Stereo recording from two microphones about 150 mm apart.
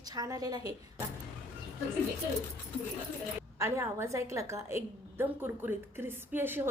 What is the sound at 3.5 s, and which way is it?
A woman's voice, 20° right (ahead or behind).